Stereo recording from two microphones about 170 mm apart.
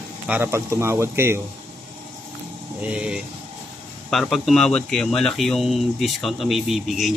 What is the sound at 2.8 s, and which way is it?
Speech, 5° right (ahead or behind).